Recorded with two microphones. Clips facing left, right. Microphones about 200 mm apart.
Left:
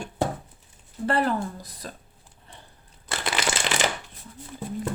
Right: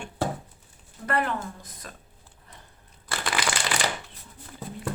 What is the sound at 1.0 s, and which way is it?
Speech, 30° left (ahead or behind).